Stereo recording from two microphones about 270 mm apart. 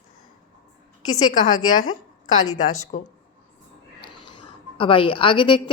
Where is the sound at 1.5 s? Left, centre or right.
Left.